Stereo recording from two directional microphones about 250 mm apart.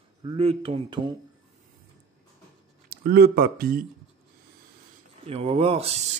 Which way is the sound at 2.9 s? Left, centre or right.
Right.